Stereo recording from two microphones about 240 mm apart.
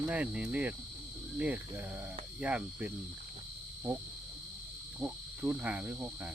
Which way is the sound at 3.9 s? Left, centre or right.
Centre.